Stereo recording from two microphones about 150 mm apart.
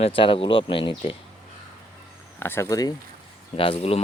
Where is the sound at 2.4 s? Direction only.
15° left (ahead or behind).